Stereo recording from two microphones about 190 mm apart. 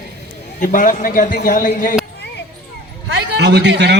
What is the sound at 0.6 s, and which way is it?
A man's voice, 45° left (ahead or behind).